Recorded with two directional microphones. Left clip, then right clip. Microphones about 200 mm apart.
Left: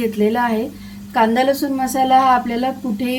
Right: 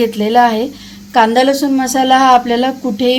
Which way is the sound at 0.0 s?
40° right (ahead or behind).